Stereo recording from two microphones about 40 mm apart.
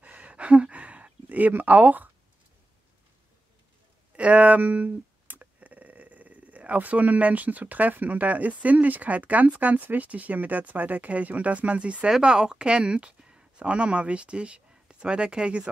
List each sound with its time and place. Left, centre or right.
0.0 s a sound: right
1.8 s speech: right
4.2 s speech: right
12.2 s a woman's voice: right